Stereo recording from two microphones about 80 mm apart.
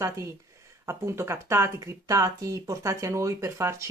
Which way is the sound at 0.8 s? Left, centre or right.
Right.